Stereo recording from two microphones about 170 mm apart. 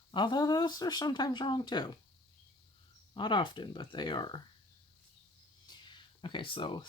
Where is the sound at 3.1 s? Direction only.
30° left (ahead or behind).